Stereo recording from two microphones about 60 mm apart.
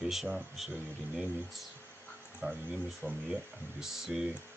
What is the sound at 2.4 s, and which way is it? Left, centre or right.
Speech, right.